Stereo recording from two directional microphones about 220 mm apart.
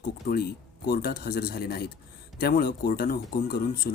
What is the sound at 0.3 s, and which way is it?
Speech, 45° left (ahead or behind).